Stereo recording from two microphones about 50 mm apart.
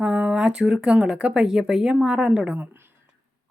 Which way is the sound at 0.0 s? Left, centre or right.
Right.